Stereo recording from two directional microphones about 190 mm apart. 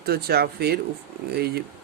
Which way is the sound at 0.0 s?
55° right (ahead or behind).